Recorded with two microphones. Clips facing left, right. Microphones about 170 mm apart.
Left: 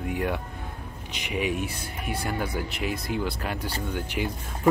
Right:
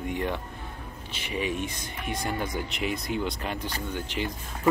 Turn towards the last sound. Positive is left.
turn(degrees=10)  # may be behind; listen again after turning